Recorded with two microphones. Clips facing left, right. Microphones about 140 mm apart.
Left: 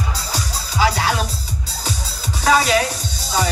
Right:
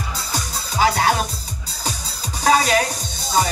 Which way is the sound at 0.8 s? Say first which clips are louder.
Right 1 dB; 45° right (ahead or behind).